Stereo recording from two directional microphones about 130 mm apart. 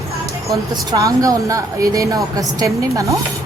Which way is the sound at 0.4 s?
25° right (ahead or behind).